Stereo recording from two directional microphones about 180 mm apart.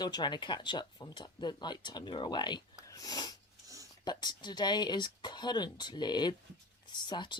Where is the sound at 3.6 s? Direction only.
20° right (ahead or behind).